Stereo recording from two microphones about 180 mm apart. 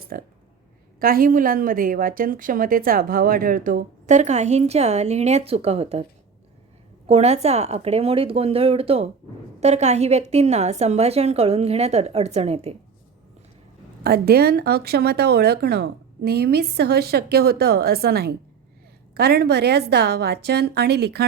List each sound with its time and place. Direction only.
0.1 s a woman's voice: 55° right (ahead or behind); by 6.1 s 35° right (ahead or behind)
7.1 s a woman's voice: 35° right (ahead or behind)
14.0 s speech: 60° right (ahead or behind)